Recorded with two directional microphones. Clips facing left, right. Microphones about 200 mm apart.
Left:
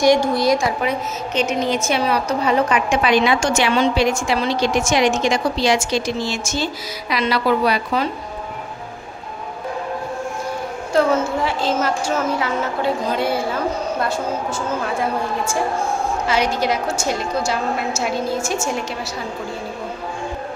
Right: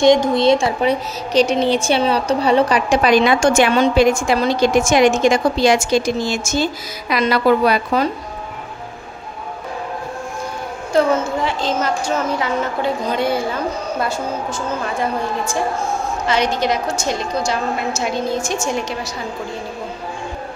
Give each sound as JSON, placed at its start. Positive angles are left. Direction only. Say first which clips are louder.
{"t": 0.0, "sound": "a woman's voice", "louder": "right 3 dB", "side_deg": -20}
{"t": 10.9, "sound": "a woman's voice", "louder": "right 1 dB", "side_deg": 0}
{"t": 16.3, "sound": "a woman's voice", "louder": "right 2 dB", "side_deg": 10}